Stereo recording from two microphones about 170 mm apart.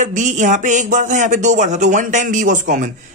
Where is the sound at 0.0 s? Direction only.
45° right (ahead or behind).